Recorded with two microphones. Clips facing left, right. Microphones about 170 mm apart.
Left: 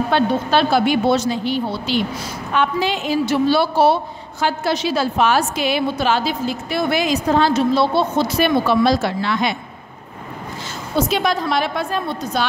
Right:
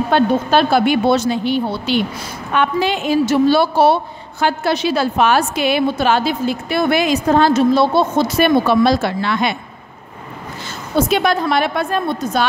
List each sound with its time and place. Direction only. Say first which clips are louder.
0.1 s a woman's voice: right 4 dB; 50° right (ahead or behind)
11.0 s a woman's voice: right 3 dB; 60° right (ahead or behind)